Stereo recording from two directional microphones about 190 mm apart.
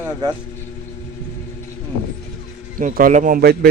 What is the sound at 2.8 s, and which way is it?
Speech, 45° right (ahead or behind).